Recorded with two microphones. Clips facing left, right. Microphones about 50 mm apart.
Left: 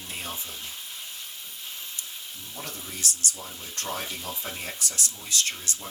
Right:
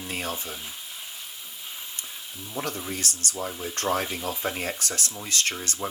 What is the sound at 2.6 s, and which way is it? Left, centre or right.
Speech, right.